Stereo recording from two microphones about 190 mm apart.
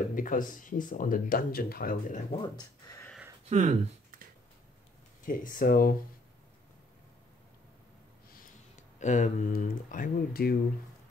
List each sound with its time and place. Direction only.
0.1 s speech: 45° left (ahead or behind)
2.3 s speech: 20° left (ahead or behind)
3.4 s a sound: 35° right (ahead or behind)
5.2 s speech: 45° left (ahead or behind)
8.3 s speech: 45° left (ahead or behind)